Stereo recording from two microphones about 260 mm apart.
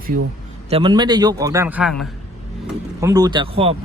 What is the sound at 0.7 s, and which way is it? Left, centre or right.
A man's voice, centre.